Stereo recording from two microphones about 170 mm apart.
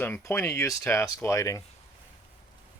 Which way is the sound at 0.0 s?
15° left (ahead or behind).